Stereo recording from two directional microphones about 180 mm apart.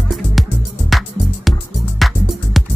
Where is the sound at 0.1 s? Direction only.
Centre (ahead or behind).